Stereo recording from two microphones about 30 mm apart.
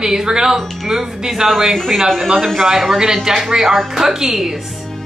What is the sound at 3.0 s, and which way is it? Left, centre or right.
Speech, centre.